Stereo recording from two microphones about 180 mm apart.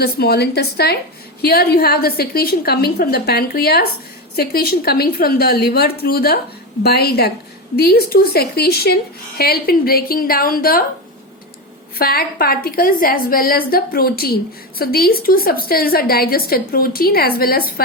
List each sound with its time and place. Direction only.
0.0 s a woman's voice: 60° left (ahead or behind)
11.9 s a woman's voice: 55° left (ahead or behind)